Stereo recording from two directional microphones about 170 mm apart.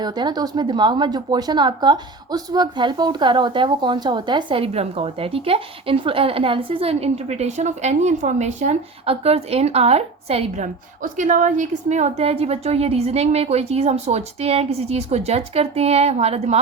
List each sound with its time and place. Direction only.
0.0 s speech: 25° right (ahead or behind)